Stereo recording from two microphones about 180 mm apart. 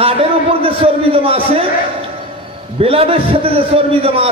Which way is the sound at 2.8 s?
30° right (ahead or behind).